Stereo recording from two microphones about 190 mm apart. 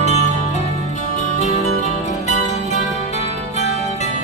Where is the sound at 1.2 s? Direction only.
40° left (ahead or behind).